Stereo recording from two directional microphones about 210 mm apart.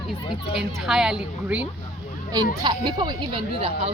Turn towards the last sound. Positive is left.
turn(degrees=-25)  # may be behind; listen again after turning